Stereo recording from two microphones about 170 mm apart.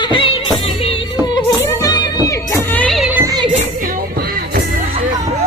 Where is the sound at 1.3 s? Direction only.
25° left (ahead or behind); by 3.1 s 5° left (ahead or behind).